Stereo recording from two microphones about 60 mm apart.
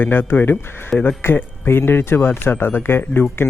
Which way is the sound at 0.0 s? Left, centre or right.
Left.